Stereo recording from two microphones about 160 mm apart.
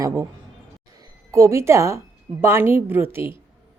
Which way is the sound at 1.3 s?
15° right (ahead or behind).